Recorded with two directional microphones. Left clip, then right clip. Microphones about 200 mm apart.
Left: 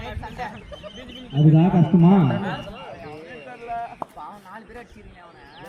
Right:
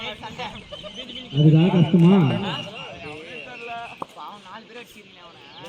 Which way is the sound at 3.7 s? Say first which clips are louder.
Left 5 dB; 45° left (ahead or behind).